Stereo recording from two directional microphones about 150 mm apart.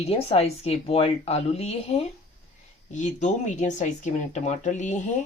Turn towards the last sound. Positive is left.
turn(degrees=55)  # may be behind; listen again after turning